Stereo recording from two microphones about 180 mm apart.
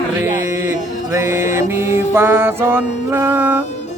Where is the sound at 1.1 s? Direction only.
15° right (ahead or behind).